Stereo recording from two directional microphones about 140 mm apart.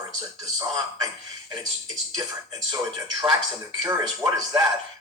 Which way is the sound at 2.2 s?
25° right (ahead or behind).